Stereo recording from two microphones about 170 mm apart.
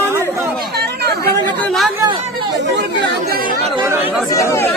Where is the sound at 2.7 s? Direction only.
90° right.